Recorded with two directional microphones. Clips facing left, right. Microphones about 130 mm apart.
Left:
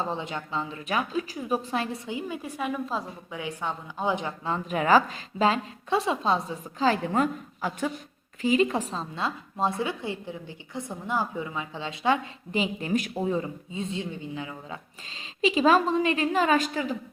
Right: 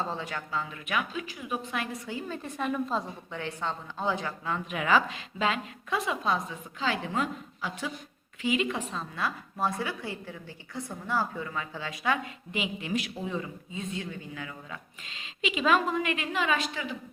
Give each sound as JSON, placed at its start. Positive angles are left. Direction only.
{"t": 0.0, "sound": "a woman's voice", "side_deg": 20}
{"t": 2.0, "sound": "a woman's voice", "side_deg": 15}
{"t": 15.1, "sound": "a woman's voice", "side_deg": 35}